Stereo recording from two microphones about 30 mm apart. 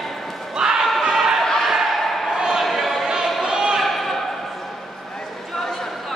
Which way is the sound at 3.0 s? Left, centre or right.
Centre.